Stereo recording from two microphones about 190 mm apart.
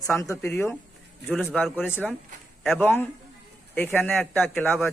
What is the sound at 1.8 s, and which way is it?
Speech, 10° left (ahead or behind).